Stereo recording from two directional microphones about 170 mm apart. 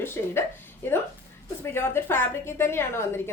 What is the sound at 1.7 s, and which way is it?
A woman's voice, 15° left (ahead or behind).